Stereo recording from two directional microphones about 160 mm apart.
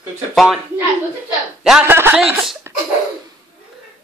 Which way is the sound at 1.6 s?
5° right (ahead or behind).